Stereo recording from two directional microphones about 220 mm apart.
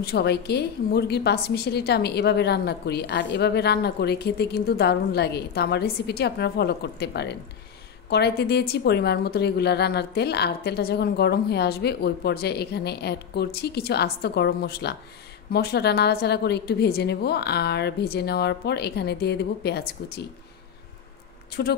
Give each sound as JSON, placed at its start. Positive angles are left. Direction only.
{"t": 0.0, "sound": "a woman's voice", "side_deg": 45}
{"t": 21.6, "sound": "a woman's voice", "side_deg": 45}